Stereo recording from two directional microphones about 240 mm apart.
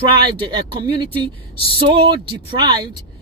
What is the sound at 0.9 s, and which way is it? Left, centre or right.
Speech, centre.